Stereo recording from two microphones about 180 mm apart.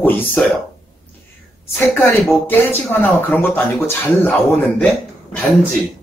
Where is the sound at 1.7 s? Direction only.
10° left (ahead or behind).